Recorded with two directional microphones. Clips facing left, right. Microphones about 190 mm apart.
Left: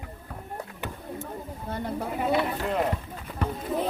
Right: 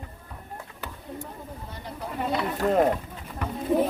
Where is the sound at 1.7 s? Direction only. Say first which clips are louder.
Left 8 dB; 55° left (ahead or behind).